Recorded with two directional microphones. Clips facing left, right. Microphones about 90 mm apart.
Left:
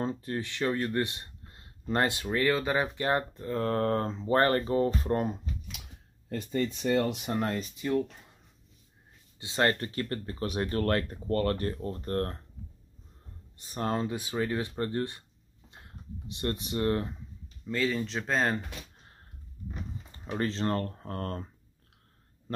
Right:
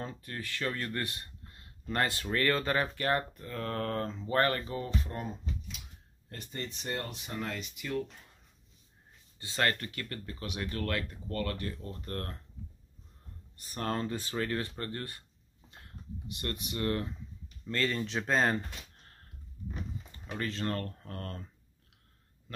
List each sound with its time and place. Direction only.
0.0 s speech: 30° left (ahead or behind)
2.2 s speech: 10° left (ahead or behind); by 5.3 s 45° left (ahead or behind)
7.0 s speech: 90° left
7.2 s speech: 50° left (ahead or behind); by 8.0 s 30° left (ahead or behind)
9.4 s speech: 25° left (ahead or behind)
13.6 s speech: 20° left (ahead or behind)
15.7 s a sound: 25° left (ahead or behind)
17.6 s speech: 5° left (ahead or behind)
20.1 s speech: 30° left (ahead or behind)